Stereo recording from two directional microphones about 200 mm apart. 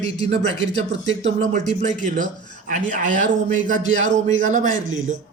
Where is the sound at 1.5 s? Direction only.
35° right (ahead or behind).